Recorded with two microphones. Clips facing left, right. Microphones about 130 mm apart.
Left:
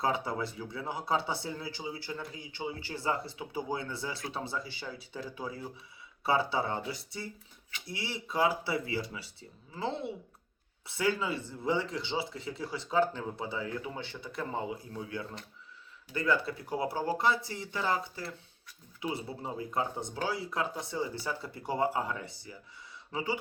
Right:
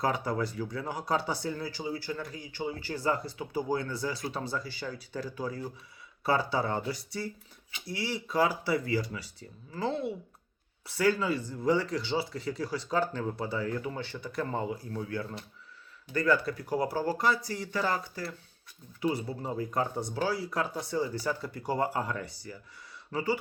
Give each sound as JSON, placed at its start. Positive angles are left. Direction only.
{"t": 0.0, "sound": "speech", "side_deg": 25}
{"t": 16.1, "sound": "speech", "side_deg": 20}